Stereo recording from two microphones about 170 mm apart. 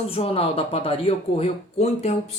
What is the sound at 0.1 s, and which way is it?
Speech, 35° left (ahead or behind).